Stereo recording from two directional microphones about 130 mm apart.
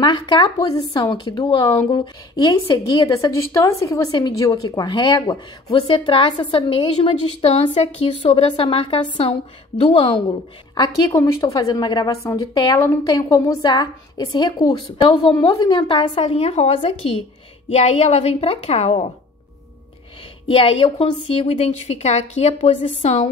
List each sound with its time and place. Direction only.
0.0 s a woman's voice: 35° left (ahead or behind)
10.7 s a woman's voice: 30° left (ahead or behind)
13.1 s a woman's voice: 30° left (ahead or behind)
16.0 s a woman's voice: 45° left (ahead or behind)
20.4 s a woman's voice: 45° left (ahead or behind)